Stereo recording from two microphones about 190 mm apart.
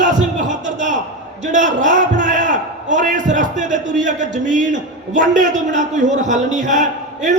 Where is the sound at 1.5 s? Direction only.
40° right (ahead or behind).